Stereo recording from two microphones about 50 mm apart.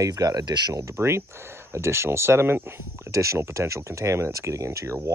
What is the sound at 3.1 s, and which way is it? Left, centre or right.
Speech, right.